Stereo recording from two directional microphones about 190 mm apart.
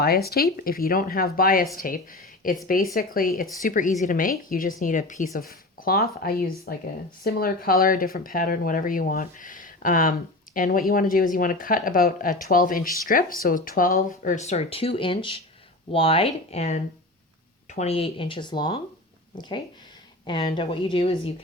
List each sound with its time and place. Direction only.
0.0 s speech: 55° left (ahead or behind); by 18.8 s 25° left (ahead or behind)
20.2 s speech: 25° left (ahead or behind)